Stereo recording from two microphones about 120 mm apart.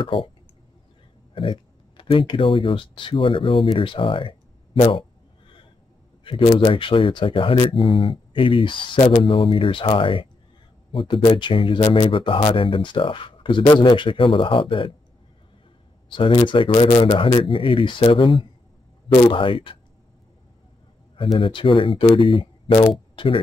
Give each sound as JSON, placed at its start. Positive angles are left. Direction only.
{"t": 0.0, "sound": "speech", "side_deg": 45}
{"t": 1.3, "sound": "speech", "side_deg": 45}
{"t": 6.2, "sound": "speech", "side_deg": 50}
{"t": 16.1, "sound": "speech", "side_deg": 45}
{"t": 21.2, "sound": "speech", "side_deg": 45}